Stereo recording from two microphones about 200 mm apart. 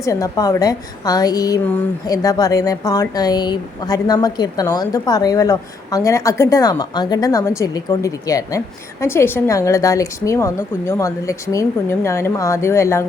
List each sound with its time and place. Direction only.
0.0 s a woman's voice: 15° left (ahead or behind)